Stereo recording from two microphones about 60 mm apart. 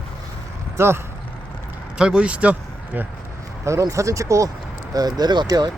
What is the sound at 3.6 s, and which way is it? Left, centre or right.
Speech, right.